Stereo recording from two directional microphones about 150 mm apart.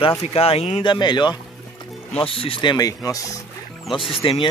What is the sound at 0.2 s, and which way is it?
Speech, 40° left (ahead or behind).